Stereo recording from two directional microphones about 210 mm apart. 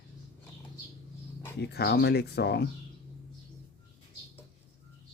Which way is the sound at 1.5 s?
50° left (ahead or behind).